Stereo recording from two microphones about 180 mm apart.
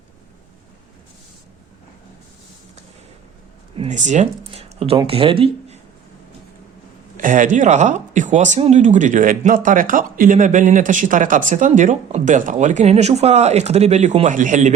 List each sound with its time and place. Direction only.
3.8 s a sound: 40° right (ahead or behind)
4.9 s speech: 30° right (ahead or behind)
7.2 s speech: 45° right (ahead or behind)